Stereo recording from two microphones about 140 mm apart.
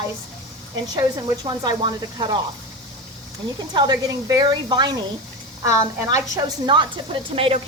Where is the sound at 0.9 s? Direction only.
25° right (ahead or behind).